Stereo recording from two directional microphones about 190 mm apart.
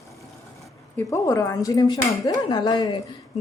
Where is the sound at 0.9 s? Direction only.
15° left (ahead or behind).